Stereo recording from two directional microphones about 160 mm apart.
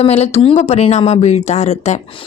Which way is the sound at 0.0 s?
40° left (ahead or behind).